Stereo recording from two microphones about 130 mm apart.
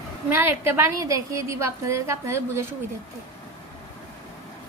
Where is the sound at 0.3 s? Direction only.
20° right (ahead or behind).